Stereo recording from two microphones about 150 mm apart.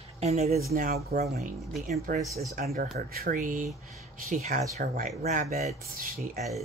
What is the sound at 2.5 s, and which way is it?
Speech, 80° right.